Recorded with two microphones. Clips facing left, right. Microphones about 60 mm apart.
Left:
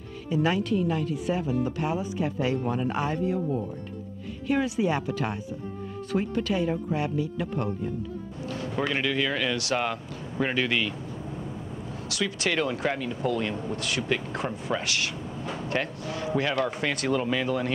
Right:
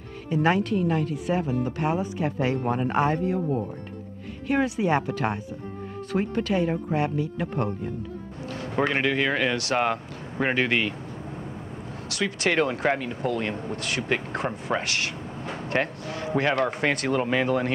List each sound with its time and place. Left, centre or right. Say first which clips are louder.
0.3 s speech: right 2 dB; right
12.1 s speech: right 3 dB; right